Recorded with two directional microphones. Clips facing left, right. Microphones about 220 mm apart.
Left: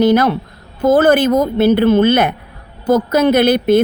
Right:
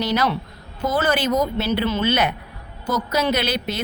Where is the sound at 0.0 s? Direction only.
55° left (ahead or behind).